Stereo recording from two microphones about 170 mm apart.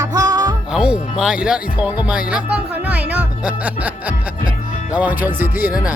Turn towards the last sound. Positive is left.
turn(degrees=-10)  # may be behind; listen again after turning